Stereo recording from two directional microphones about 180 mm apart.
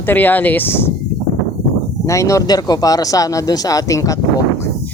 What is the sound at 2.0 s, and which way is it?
Speech, 15° left (ahead or behind).